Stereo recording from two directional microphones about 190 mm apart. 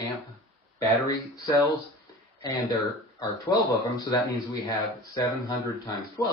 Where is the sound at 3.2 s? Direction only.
20° left (ahead or behind).